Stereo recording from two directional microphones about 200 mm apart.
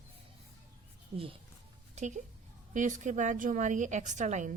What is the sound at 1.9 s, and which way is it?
A woman's voice, 35° right (ahead or behind).